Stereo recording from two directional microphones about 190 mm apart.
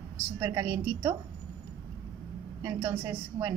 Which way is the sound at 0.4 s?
20° right (ahead or behind).